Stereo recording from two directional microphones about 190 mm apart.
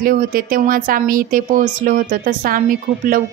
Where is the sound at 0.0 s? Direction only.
50° right (ahead or behind).